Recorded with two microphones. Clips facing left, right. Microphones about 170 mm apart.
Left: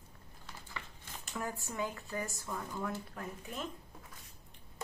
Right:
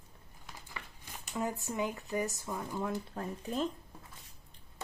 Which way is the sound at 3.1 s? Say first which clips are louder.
Right 7 dB; 35° right (ahead or behind).